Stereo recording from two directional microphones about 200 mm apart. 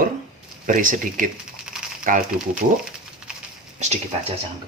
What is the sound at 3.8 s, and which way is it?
Speech, 35° right (ahead or behind).